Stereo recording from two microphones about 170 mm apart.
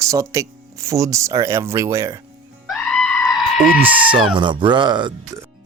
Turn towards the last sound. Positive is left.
turn(degrees=-25)  # may be behind; listen again after turning